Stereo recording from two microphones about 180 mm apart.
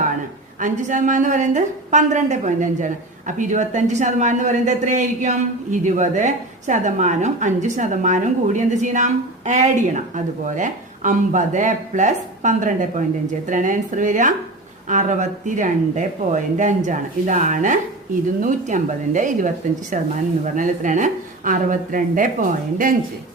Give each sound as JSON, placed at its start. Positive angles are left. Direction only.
{"t": 0.6, "sound": "a woman's voice", "side_deg": -45}